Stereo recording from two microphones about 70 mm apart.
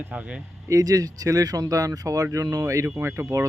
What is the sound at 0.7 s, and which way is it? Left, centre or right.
Speech, right.